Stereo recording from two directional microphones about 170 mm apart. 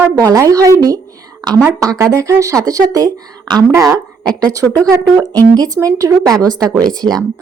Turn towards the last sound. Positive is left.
turn(degrees=-25)  # may be behind; listen again after turning